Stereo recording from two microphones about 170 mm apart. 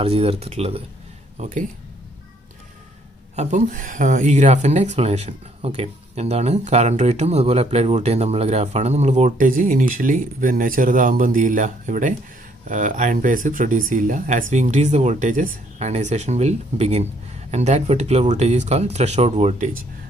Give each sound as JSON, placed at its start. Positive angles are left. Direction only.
{"t": 0.0, "sound": "speech", "side_deg": -35}
{"t": 1.4, "sound": "speech", "side_deg": -50}
{"t": 3.3, "sound": "speech", "side_deg": -45}